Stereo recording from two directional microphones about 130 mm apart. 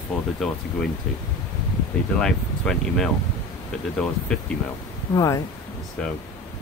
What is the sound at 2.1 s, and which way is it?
Speech, 5° left (ahead or behind).